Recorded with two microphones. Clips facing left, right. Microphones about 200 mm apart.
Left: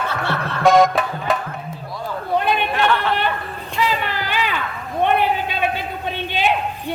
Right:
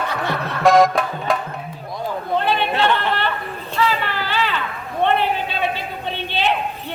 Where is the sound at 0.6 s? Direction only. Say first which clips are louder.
Even; centre (ahead or behind).